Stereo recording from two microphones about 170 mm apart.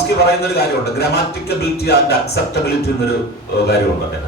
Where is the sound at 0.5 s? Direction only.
70° left (ahead or behind).